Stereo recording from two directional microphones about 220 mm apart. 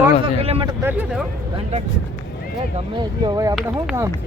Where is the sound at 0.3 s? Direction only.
25° right (ahead or behind).